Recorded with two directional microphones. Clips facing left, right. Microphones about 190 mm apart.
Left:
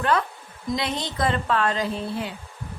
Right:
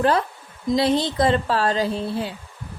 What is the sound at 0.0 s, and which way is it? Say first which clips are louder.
A woman's voice: right 3 dB; 35° right (ahead or behind).